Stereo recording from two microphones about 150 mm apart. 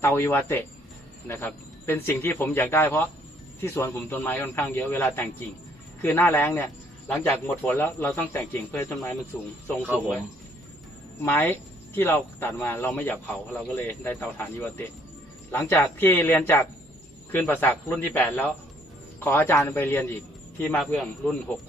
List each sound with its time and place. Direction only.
0.0 s a man's voice: 15° left (ahead or behind)
11.2 s a man's voice: 15° left (ahead or behind)
15.5 s a man's voice: 20° left (ahead or behind)